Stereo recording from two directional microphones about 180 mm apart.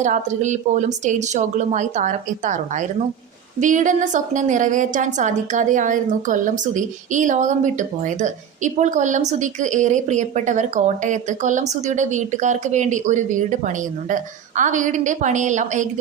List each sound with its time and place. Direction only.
0.0 s a woman's voice: 40° right (ahead or behind)